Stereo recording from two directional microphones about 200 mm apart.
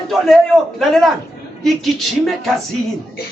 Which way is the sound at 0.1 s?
Centre (ahead or behind).